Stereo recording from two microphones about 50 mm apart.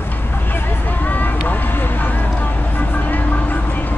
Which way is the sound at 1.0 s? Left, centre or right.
Left.